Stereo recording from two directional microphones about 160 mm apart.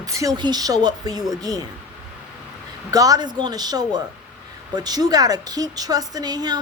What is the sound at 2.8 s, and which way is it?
Speech, 20° right (ahead or behind).